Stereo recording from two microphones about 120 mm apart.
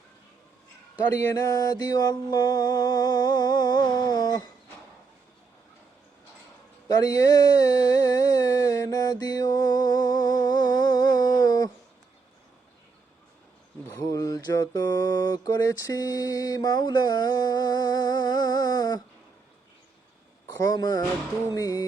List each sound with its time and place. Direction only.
1.0 s a sound: 15° left (ahead or behind)
1.4 s mantra: 30° left (ahead or behind)
6.8 s a sound: 30° left (ahead or behind)
14.1 s mantra: 30° left (ahead or behind)
20.6 s mantra: 30° left (ahead or behind)
21.5 s music: 30° left (ahead or behind)